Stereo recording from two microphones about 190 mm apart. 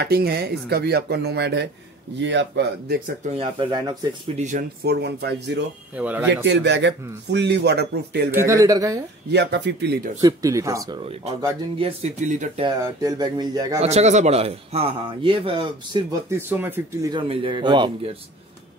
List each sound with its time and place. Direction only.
0.0 s speech: 55° right (ahead or behind)
3.3 s a man's voice: 30° right (ahead or behind)
4.4 s speech: 40° right (ahead or behind)
4.8 s speech: 60° right (ahead or behind)
5.9 s speech: 5° right (ahead or behind)
6.4 s speech: 65° right (ahead or behind)
8.3 s speech: 15° right (ahead or behind)
9.3 s speech: 60° right (ahead or behind)
10.2 s speech: 15° right (ahead or behind)
11.8 s speech: 35° right (ahead or behind)
12.6 s a man's voice: 20° right (ahead or behind)
13.7 s a man's voice: 35° right (ahead or behind); by 17.1 s 10° right (ahead or behind)
17.1 s a man's voice: 25° right (ahead or behind)